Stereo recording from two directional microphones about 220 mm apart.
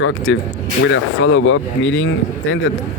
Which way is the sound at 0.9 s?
60° left (ahead or behind).